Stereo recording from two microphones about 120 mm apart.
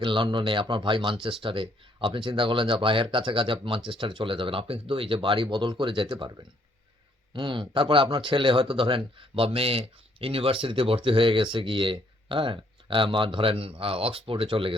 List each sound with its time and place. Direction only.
0.0 s a man's voice: 45° right (ahead or behind)
7.3 s a man's voice: 40° right (ahead or behind)